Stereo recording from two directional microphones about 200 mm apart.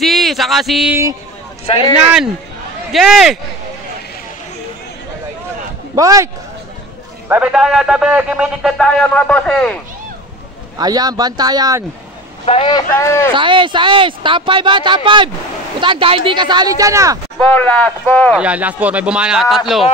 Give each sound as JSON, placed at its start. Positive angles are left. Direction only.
{"t": 0.0, "sound": "a sound", "side_deg": 0}
{"t": 1.7, "sound": "speech", "side_deg": 25}
{"t": 2.9, "sound": "a man's voice", "side_deg": 0}
{"t": 5.9, "sound": "a man's voice", "side_deg": -15}
{"t": 7.2, "sound": "a man's voice", "side_deg": -5}
{"t": 10.8, "sound": "speech", "side_deg": -20}
{"t": 12.4, "sound": "speech", "side_deg": 25}
{"t": 12.9, "sound": "speech", "side_deg": 15}
{"t": 13.3, "sound": "speech", "side_deg": -25}
{"t": 17.4, "sound": "speech", "side_deg": 10}
{"t": 18.3, "sound": "a man's voice", "side_deg": -5}